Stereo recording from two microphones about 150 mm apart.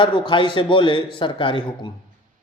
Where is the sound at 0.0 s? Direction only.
35° left (ahead or behind).